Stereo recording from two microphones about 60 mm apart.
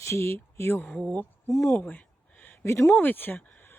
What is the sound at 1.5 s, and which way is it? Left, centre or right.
Speech, left.